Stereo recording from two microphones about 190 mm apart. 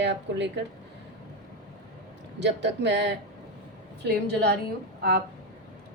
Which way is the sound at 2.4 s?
65° right (ahead or behind).